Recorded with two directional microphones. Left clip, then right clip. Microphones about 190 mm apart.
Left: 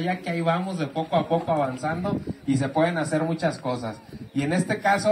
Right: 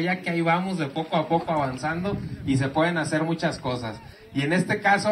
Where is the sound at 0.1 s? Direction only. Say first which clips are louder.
Even; 55° left (ahead or behind).